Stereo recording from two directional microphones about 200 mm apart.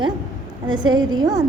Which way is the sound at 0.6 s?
20° right (ahead or behind).